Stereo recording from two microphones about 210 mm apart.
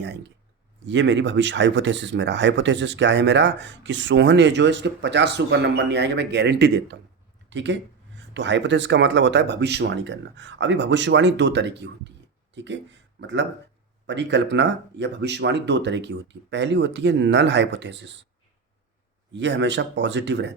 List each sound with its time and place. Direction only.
0.0 s speech: 55° right (ahead or behind)
19.3 s speech: 60° right (ahead or behind)